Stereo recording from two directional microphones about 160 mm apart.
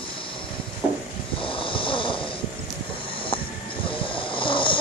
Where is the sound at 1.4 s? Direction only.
35° left (ahead or behind).